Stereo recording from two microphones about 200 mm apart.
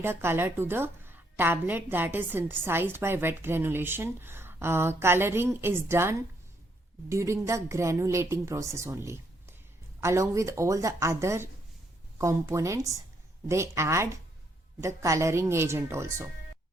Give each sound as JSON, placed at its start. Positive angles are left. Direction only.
{"t": 0.0, "sound": "a woman's voice", "side_deg": -10}